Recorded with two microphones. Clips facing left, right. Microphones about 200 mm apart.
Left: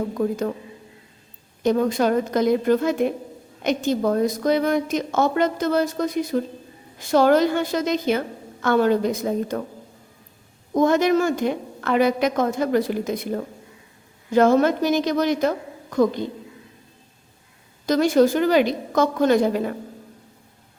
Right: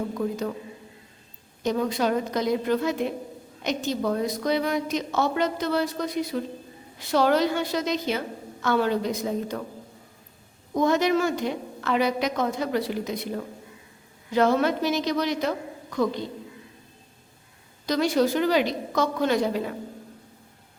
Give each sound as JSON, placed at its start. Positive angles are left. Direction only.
{"t": 0.2, "sound": "a woman's voice", "side_deg": 45}
{"t": 1.6, "sound": "a woman's voice", "side_deg": 50}
{"t": 10.8, "sound": "a woman's voice", "side_deg": 50}
{"t": 17.8, "sound": "a woman's voice", "side_deg": 50}